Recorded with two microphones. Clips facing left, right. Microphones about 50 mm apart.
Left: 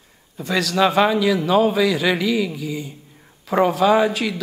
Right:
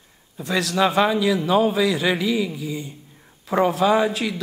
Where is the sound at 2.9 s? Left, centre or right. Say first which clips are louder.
Left 1 dB; centre.